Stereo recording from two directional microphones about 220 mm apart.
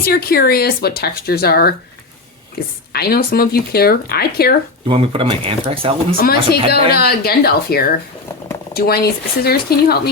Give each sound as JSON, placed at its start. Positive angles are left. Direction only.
{"t": 0.0, "sound": "speech", "side_deg": 45}
{"t": 4.9, "sound": "speech", "side_deg": -25}
{"t": 6.1, "sound": "speech", "side_deg": 45}